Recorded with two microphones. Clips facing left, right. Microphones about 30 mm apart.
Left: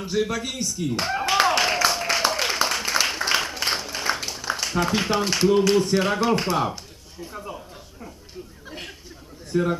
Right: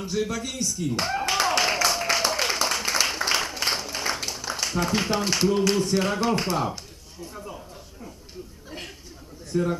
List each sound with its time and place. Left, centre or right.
0.0 s clapping: centre
8.6 s a sound: centre
9.5 s a man's voice: left